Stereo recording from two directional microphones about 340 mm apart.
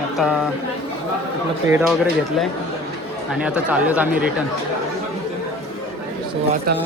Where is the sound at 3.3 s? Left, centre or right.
Centre.